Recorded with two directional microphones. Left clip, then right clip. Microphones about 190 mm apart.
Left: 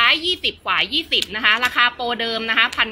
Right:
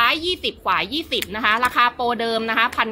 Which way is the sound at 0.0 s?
30° right (ahead or behind).